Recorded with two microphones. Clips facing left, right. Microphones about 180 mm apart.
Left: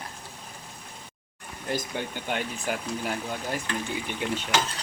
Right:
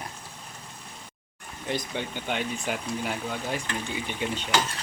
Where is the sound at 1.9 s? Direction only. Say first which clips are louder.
Even; 10° left (ahead or behind).